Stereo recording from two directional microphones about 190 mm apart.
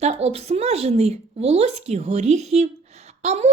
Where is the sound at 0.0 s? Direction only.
35° right (ahead or behind).